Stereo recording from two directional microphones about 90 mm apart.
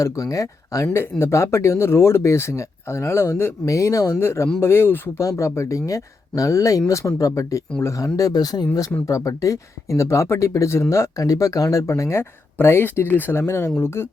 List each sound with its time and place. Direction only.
0.0 s speech: 40° left (ahead or behind)